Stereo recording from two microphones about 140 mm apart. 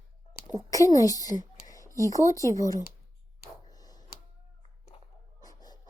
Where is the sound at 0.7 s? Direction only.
25° left (ahead or behind).